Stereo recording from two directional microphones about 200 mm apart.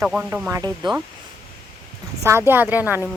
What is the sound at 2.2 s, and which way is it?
Speech, 10° right (ahead or behind).